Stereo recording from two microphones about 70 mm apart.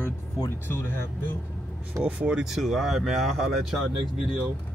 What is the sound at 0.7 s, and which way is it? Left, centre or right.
Speech, left.